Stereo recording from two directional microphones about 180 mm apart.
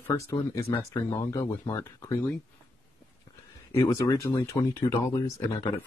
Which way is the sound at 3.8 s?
20° left (ahead or behind).